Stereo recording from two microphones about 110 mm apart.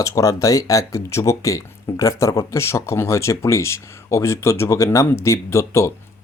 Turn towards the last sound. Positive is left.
turn(degrees=25)  # may be behind; listen again after turning